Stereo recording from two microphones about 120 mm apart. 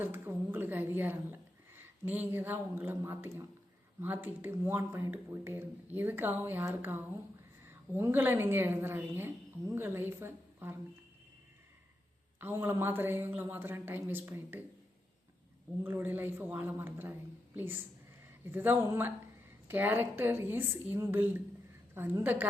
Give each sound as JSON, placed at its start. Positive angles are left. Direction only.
{"t": 0.0, "sound": "a woman's voice", "side_deg": -20}
{"t": 12.4, "sound": "a woman's voice", "side_deg": -20}
{"t": 15.8, "sound": "a woman's voice", "side_deg": -15}